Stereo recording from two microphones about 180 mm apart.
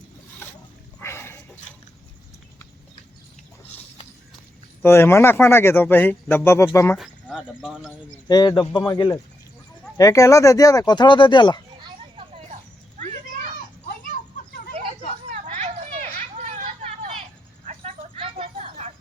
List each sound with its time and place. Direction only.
0.9 s a sound: 15° left (ahead or behind)
4.8 s speech: 15° left (ahead or behind)
6.9 s speech: centre (ahead or behind)
8.3 s speech: 25° left (ahead or behind)
15.3 s vehicle: 40° right (ahead or behind)
17.7 s a sound: 35° right (ahead or behind)